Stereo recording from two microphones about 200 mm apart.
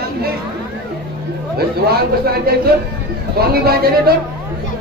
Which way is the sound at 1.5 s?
50° right (ahead or behind).